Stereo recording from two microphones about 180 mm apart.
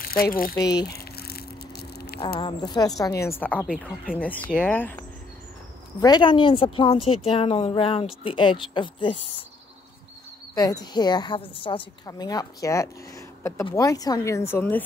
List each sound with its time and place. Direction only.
0.0 s speech: 55° left (ahead or behind)
0.6 s a woman's voice: 20° left (ahead or behind)
0.8 s a sound: 60° left (ahead or behind)
2.4 s a woman's voice: 20° left (ahead or behind)
3.6 s speech: 5° right (ahead or behind)
4.2 s speech: 10° left (ahead or behind)
5.9 s a woman's voice: 25° left (ahead or behind)
10.5 s a woman's voice: 20° left (ahead or behind)